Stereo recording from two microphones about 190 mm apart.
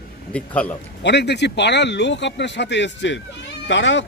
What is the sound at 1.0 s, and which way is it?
Speech, 60° left (ahead or behind).